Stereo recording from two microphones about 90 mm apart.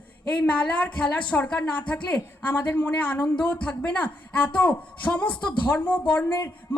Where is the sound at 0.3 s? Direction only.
15° left (ahead or behind).